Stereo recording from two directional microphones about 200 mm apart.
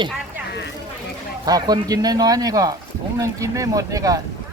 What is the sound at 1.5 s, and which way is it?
Speech, 20° right (ahead or behind).